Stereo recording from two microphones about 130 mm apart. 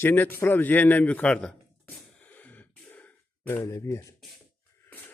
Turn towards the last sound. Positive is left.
turn(degrees=15)  # may be behind; listen again after turning